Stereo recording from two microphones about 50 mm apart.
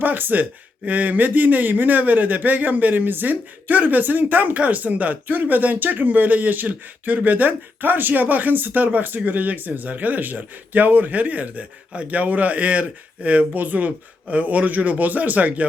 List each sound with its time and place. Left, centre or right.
0.0 s speech: right